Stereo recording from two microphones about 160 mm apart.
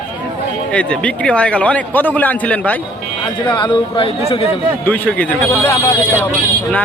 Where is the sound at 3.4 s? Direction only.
30° left (ahead or behind).